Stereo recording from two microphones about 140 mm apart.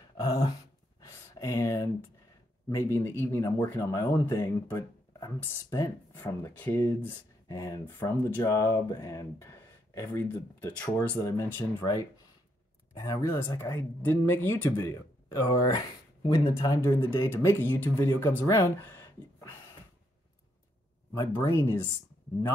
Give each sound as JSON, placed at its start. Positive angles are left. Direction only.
{"t": 1.0, "sound": "a sound", "side_deg": 20}
{"t": 2.7, "sound": "speech", "side_deg": 20}
{"t": 6.2, "sound": "speech", "side_deg": 10}
{"t": 7.1, "sound": "speech", "side_deg": 25}
{"t": 17.0, "sound": "speech", "side_deg": 35}
{"t": 17.3, "sound": "speech", "side_deg": 20}
{"t": 21.1, "sound": "speech", "side_deg": 20}